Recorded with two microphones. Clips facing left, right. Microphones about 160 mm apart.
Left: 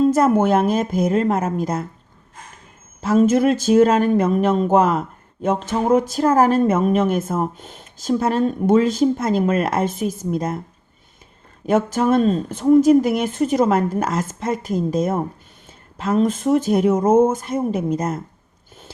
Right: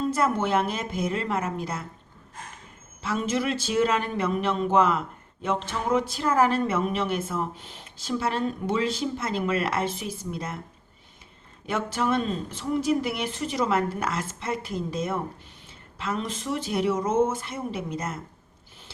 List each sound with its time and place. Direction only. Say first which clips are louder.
0.0 s speech: left 10 dB; 45° left (ahead or behind)
3.0 s speech: left 12 dB; 45° left (ahead or behind)
11.6 s speech: left 9 dB; 45° left (ahead or behind)